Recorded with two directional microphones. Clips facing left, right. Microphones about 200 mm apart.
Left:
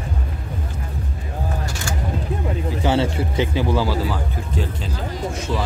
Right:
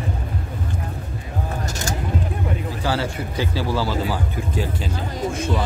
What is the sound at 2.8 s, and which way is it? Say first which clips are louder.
Speech: left 5 dB; 25° left (ahead or behind).